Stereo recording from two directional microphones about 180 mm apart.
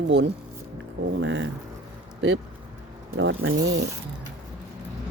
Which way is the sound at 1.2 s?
90° right.